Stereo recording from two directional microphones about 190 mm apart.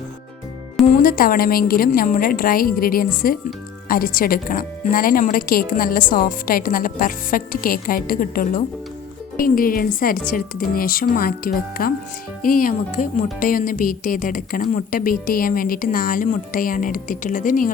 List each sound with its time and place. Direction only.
0.9 s speech: 50° left (ahead or behind)